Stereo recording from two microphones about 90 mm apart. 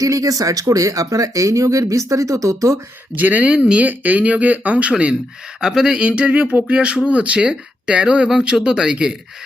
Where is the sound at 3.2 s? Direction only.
15° right (ahead or behind).